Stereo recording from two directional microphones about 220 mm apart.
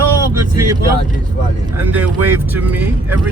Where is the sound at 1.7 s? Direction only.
10° right (ahead or behind).